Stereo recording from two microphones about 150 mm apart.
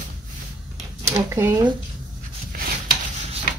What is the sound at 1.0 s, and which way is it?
Speech, 20° right (ahead or behind).